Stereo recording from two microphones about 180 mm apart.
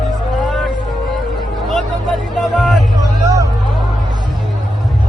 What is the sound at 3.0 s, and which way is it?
Vehicle, 20° right (ahead or behind).